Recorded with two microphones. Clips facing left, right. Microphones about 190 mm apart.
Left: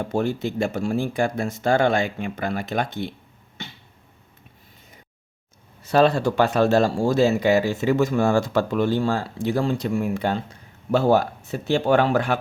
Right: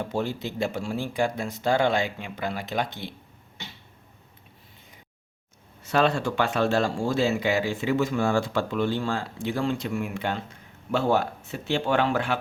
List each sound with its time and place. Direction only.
0.1 s speech: 50° left (ahead or behind)
5.8 s speech: 35° left (ahead or behind)